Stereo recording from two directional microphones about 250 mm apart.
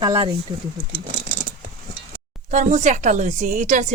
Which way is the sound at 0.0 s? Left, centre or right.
Centre.